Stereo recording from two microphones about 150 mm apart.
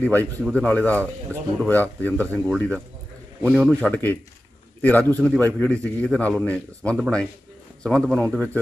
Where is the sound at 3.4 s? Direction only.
15° right (ahead or behind).